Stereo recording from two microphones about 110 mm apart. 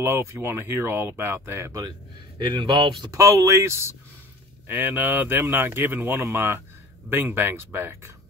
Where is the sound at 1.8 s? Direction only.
40° right (ahead or behind).